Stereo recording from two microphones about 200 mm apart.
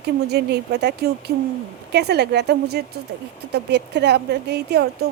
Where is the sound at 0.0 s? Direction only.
55° right (ahead or behind).